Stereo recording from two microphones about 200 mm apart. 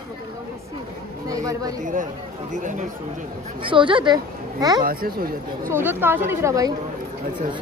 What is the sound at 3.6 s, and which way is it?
Speech, 25° right (ahead or behind).